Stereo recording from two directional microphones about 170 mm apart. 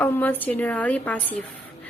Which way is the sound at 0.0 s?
10° left (ahead or behind).